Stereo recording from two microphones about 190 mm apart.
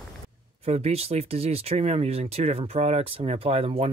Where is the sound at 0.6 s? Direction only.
30° right (ahead or behind).